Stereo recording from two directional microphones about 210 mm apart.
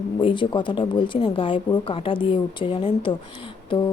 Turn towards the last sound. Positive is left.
turn(degrees=25)  # may be behind; listen again after turning